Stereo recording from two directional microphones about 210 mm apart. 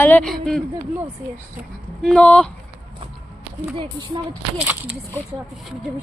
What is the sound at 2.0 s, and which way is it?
Speech, 5° left (ahead or behind).